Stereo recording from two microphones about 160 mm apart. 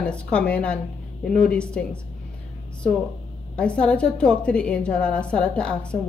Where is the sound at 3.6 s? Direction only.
5° left (ahead or behind).